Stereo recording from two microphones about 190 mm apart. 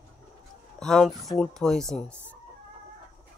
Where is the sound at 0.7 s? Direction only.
Centre (ahead or behind).